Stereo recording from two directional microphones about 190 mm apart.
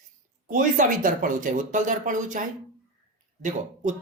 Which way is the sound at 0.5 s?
45° right (ahead or behind).